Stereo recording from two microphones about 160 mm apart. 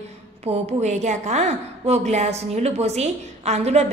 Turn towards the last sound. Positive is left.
turn(degrees=-45)  # may be behind; listen again after turning